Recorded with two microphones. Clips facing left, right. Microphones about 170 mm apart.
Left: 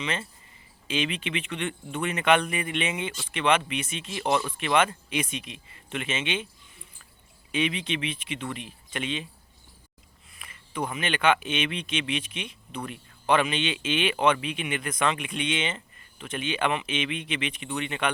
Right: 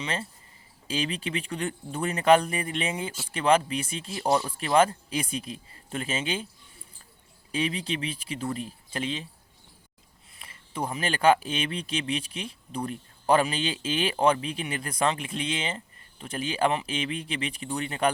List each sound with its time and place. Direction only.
0.0 s speech: 35° right (ahead or behind)
7.5 s speech: 35° right (ahead or behind)
10.3 s speech: 30° right (ahead or behind)